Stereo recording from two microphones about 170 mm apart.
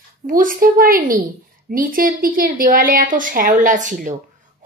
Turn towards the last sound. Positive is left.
turn(degrees=-50)  # may be behind; listen again after turning